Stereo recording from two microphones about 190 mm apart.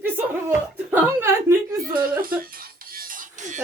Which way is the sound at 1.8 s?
50° right (ahead or behind).